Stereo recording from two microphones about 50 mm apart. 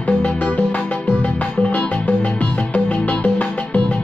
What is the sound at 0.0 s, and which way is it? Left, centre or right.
Music, left.